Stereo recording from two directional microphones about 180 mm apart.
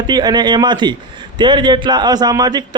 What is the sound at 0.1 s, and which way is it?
A man's voice, 25° right (ahead or behind).